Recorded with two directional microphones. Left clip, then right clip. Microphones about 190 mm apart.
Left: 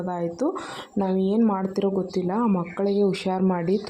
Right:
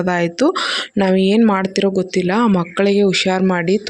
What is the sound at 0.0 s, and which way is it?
Speech, 35° right (ahead or behind).